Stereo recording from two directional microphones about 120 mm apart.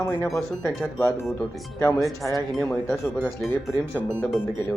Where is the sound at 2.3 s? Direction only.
Centre (ahead or behind).